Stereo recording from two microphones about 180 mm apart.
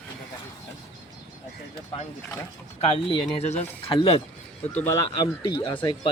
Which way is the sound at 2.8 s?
30° left (ahead or behind).